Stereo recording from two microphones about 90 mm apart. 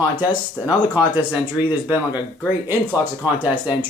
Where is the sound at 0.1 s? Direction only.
60° left (ahead or behind).